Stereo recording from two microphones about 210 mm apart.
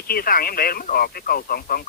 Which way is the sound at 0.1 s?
45° left (ahead or behind).